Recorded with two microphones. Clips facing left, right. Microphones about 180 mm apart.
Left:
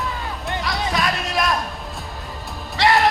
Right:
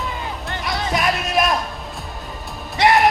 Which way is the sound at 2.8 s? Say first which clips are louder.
Right 2 dB; 20° right (ahead or behind).